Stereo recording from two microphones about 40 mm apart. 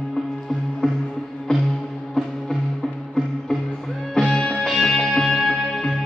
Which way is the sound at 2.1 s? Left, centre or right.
Centre.